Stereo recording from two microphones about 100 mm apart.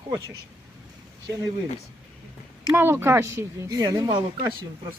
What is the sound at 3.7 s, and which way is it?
Speech, 40° right (ahead or behind).